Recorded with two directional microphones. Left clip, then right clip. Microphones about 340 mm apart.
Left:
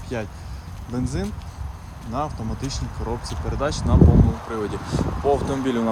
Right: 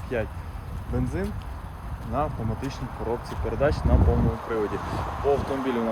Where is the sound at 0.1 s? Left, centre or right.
Centre.